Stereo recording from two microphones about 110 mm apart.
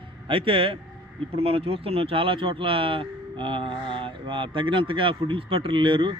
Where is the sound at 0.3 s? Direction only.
55° right (ahead or behind).